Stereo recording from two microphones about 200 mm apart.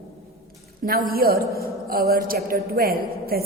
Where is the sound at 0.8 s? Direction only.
45° right (ahead or behind).